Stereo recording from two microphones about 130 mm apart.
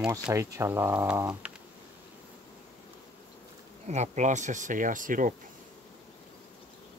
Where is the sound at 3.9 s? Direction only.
65° right (ahead or behind); by 5.3 s 90° right.